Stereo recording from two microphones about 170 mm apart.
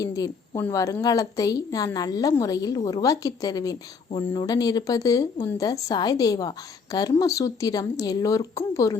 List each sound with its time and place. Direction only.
0.0 s a woman's voice: 20° left (ahead or behind)